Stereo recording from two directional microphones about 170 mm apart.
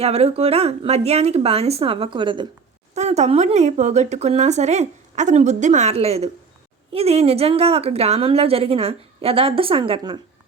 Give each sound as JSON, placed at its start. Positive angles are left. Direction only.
{"t": 0.0, "sound": "a woman's voice", "side_deg": -35}
{"t": 2.9, "sound": "a woman's voice", "side_deg": -40}